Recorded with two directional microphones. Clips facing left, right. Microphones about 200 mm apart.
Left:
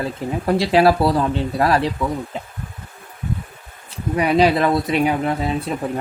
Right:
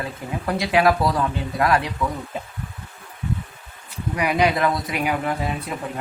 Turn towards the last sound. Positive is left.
turn(degrees=25)  # may be behind; listen again after turning